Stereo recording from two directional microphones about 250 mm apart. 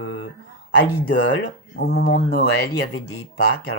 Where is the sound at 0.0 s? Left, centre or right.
Left.